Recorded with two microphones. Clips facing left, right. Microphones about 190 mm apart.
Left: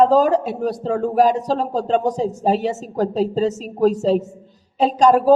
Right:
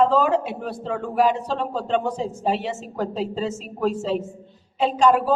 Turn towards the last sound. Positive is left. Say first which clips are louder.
# left 4 dB
turn(degrees=40)  # may be behind; listen again after turning